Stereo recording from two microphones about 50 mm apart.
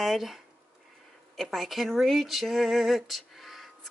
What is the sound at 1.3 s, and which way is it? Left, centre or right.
Speech, centre.